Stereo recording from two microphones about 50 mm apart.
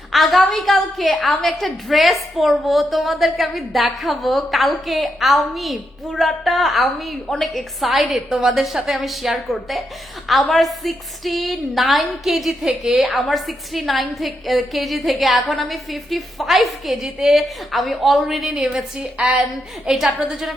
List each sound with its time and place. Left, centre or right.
0.1 s a woman's voice: centre
18.9 s a woman's voice: right
19.9 s a woman's voice: centre